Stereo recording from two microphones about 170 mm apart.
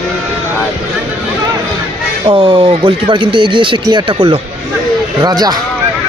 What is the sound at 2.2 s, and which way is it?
Speech, 30° right (ahead or behind).